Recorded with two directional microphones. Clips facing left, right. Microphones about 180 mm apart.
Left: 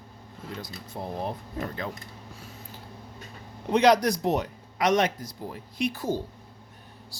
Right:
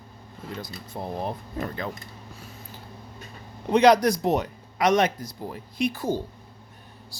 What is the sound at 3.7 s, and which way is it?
A man's voice, 55° right (ahead or behind).